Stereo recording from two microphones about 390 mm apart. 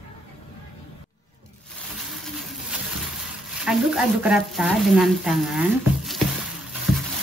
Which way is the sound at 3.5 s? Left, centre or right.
Centre.